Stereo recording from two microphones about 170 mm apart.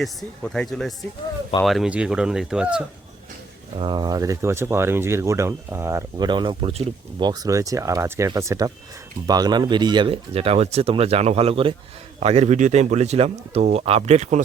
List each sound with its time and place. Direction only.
0.0 s speech: 5° left (ahead or behind)
3.8 s speech: 25° right (ahead or behind); by 14.4 s 45° right (ahead or behind)